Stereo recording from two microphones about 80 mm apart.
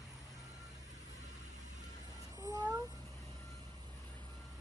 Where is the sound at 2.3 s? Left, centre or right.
Right.